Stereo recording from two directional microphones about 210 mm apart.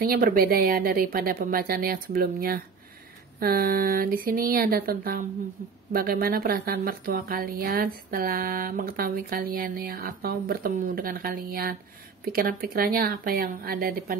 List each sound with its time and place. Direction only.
0.0 s speech: 45° right (ahead or behind)